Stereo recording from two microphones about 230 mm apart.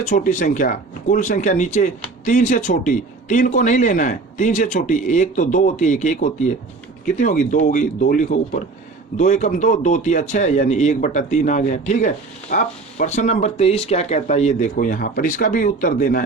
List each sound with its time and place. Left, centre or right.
0.0 s speech: left